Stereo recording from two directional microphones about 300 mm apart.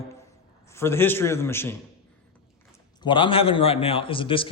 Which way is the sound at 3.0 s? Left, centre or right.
Centre.